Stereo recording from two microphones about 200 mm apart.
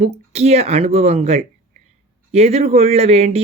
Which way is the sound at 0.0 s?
30° right (ahead or behind).